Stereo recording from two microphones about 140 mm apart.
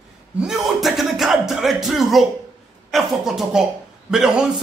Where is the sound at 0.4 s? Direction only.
Centre (ahead or behind).